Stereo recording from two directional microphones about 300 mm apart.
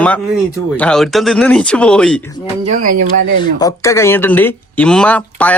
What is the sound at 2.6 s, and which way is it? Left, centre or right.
Speech, right.